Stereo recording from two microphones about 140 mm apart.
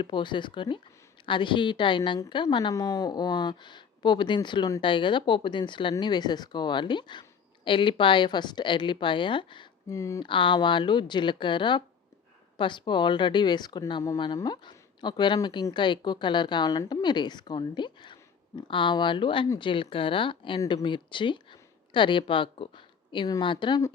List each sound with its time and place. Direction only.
0.0 s speech: 35° left (ahead or behind)
9.9 s speech: 20° left (ahead or behind)
10.2 s speech: 35° left (ahead or behind)